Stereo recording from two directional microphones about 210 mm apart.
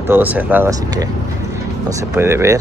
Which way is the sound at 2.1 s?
10° right (ahead or behind).